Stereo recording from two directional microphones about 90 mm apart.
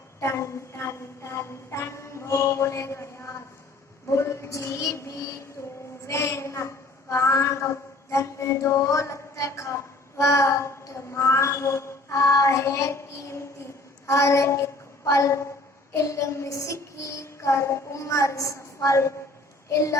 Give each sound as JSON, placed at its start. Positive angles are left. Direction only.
{"t": 0.2, "sound": "music", "side_deg": 30}
{"t": 4.1, "sound": "child singing", "side_deg": 30}
{"t": 5.6, "sound": "a sound", "side_deg": 40}
{"t": 8.1, "sound": "mantra", "side_deg": 30}
{"t": 14.1, "sound": "a woman's voice", "side_deg": 35}
{"t": 15.9, "sound": "child singing", "side_deg": 35}